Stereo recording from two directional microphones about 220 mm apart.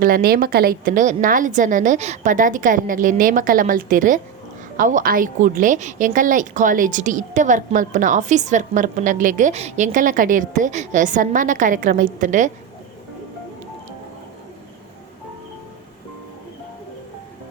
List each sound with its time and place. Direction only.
0.0 s a woman's voice: 40° right (ahead or behind)